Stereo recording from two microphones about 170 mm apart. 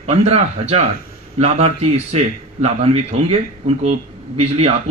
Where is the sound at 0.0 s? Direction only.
35° right (ahead or behind).